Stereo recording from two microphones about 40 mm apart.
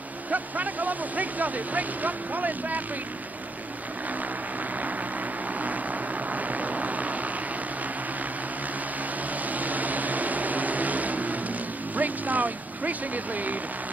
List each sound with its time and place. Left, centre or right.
0.3 s speech: right
6.3 s vehicle: right
9.5 s a sound: right
11.9 s speech: right